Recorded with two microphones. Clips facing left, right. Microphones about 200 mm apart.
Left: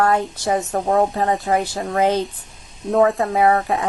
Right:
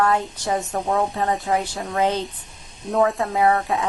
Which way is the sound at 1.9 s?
55° left (ahead or behind).